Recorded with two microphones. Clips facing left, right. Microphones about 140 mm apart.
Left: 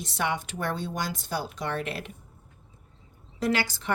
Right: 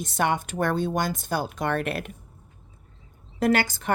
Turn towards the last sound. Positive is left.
turn(degrees=-50)  # may be behind; listen again after turning